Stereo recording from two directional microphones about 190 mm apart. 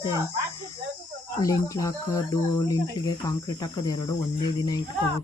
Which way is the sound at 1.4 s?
15° left (ahead or behind).